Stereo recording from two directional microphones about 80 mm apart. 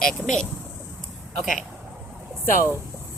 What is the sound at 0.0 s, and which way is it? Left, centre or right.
Speech, centre.